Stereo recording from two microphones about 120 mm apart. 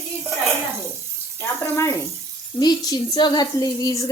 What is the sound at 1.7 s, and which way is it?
A woman's voice, 25° left (ahead or behind).